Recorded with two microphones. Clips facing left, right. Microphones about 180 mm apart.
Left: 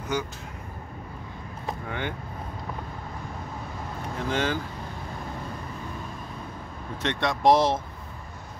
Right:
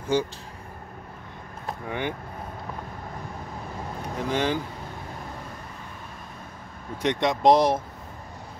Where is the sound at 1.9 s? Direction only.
15° right (ahead or behind).